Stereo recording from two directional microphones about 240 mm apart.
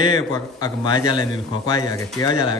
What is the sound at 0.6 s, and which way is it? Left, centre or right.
Speech, centre.